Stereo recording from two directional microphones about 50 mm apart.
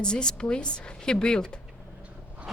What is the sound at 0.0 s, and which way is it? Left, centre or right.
Speech, centre.